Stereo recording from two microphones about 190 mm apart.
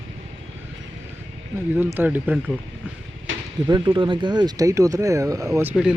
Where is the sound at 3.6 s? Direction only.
25° right (ahead or behind); by 5.9 s 5° right (ahead or behind).